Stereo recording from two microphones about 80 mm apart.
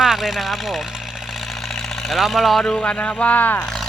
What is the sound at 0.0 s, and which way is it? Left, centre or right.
Speech, centre.